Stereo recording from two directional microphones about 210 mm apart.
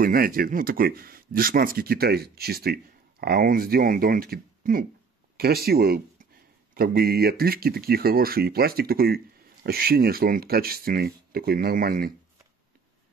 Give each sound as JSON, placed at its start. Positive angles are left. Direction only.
{"t": 0.0, "sound": "speech", "side_deg": -45}